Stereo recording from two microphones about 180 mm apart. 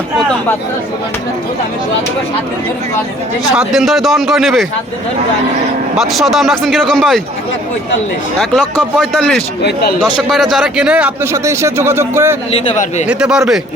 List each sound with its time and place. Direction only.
3.5 s speech: 5° right (ahead or behind)
6.0 s speech: centre (ahead or behind)
9.0 s a man's voice: centre (ahead or behind); by 12.4 s 15° right (ahead or behind)
12.5 s a man's voice: 35° left (ahead or behind)
13.1 s speech: 5° right (ahead or behind)